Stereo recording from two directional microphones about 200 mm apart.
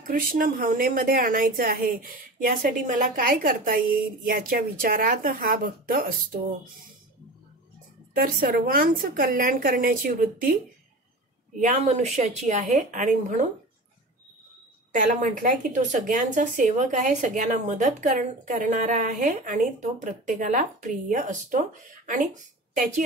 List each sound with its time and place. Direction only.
0.0 s a woman's voice: 45° right (ahead or behind)
8.1 s a woman's voice: 50° right (ahead or behind)
11.6 s speech: 35° right (ahead or behind)
14.9 s speech: 40° right (ahead or behind)